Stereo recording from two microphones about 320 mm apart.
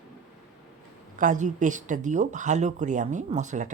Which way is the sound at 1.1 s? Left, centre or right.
Right.